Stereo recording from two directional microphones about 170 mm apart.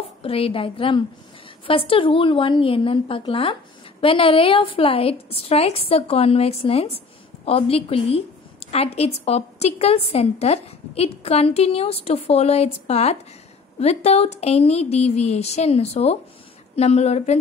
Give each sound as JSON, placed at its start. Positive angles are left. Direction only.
{"t": 0.2, "sound": "a woman's voice", "side_deg": 35}